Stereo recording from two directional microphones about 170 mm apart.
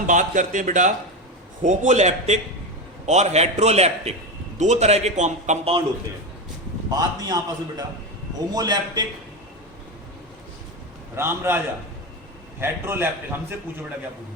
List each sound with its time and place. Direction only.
0.1 s a man's voice: 50° right (ahead or behind)
6.9 s a man's voice: 20° right (ahead or behind)
11.1 s a man's voice: 15° right (ahead or behind)